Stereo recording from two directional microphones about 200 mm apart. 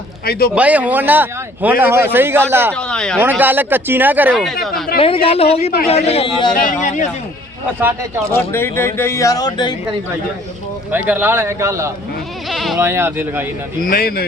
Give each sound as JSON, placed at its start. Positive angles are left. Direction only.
{"t": 0.3, "sound": "speech", "side_deg": 50}
{"t": 0.5, "sound": "speech", "side_deg": -5}
{"t": 2.7, "sound": "speech", "side_deg": 5}
{"t": 3.2, "sound": "speech", "side_deg": -10}
{"t": 4.9, "sound": "speech", "side_deg": 25}
{"t": 7.8, "sound": "speech", "side_deg": -10}
{"t": 8.3, "sound": "speech", "side_deg": 10}
{"t": 10.9, "sound": "speech", "side_deg": -10}
{"t": 12.5, "sound": "bleat", "side_deg": 0}
{"t": 12.7, "sound": "speech", "side_deg": -10}
{"t": 13.8, "sound": "speech", "side_deg": 50}